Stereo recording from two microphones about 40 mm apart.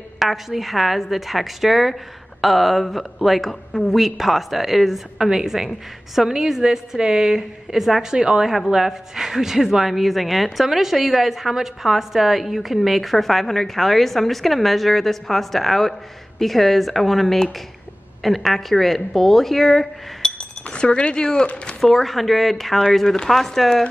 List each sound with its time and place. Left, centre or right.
0.2 s a woman's voice: centre
5.2 s a woman's voice: centre
20.2 s chink: centre
20.6 s speech: left
21.8 s a woman's voice: centre